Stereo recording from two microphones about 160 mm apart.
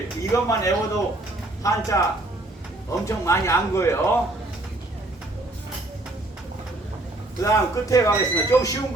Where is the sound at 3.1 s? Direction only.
20° left (ahead or behind).